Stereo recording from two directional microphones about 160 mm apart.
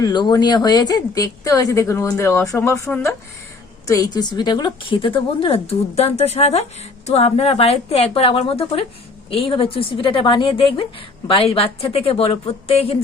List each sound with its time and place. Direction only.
0.0 s speech: 25° left (ahead or behind)